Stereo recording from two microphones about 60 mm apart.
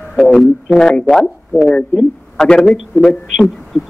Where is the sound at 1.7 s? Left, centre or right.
Centre.